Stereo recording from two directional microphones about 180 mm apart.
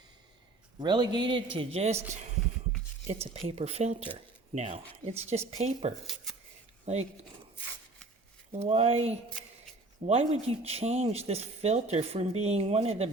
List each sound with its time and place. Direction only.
0.8 s a man's voice: 25° right (ahead or behind)
3.1 s speech: 35° right (ahead or behind)
8.5 s speech: 35° right (ahead or behind)